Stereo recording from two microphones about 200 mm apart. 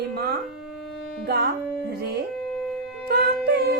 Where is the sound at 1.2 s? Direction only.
55° right (ahead or behind).